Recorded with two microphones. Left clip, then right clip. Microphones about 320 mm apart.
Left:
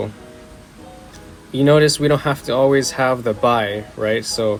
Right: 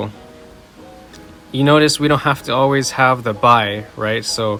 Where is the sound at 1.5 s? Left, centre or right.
Right.